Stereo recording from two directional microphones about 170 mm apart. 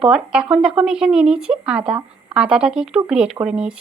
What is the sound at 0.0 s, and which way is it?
A woman's voice, 5° right (ahead or behind).